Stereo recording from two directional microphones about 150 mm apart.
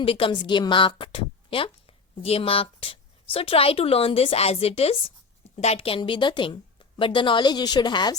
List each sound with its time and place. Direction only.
0.0 s a woman's voice: 40° left (ahead or behind)